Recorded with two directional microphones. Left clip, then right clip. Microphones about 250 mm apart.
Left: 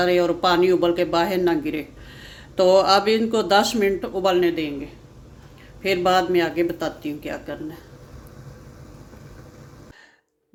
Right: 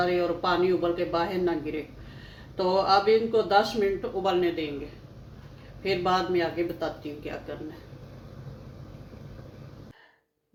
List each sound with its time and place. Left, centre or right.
0.0 s speech: left
5.8 s speech: left